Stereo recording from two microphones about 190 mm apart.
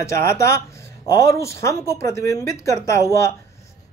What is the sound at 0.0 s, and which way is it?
Speech, 15° left (ahead or behind).